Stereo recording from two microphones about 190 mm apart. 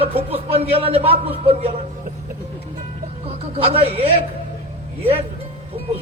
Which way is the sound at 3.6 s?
30° right (ahead or behind).